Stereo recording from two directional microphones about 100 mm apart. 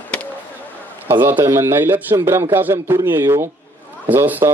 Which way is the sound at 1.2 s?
25° right (ahead or behind).